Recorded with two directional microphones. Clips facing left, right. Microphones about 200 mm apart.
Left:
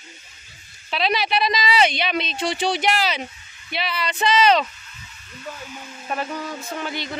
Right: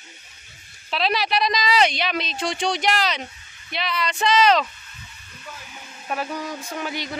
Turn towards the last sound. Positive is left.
turn(degrees=-10)  # may be behind; listen again after turning